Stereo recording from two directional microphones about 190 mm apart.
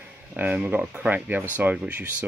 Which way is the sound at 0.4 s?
10° right (ahead or behind).